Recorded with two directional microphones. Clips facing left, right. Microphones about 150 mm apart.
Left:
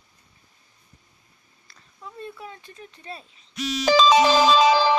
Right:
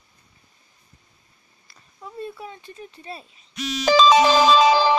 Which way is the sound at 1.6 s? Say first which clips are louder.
Right 2 dB; 10° right (ahead or behind).